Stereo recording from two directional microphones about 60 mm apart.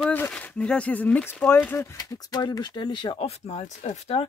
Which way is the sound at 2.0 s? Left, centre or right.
Left.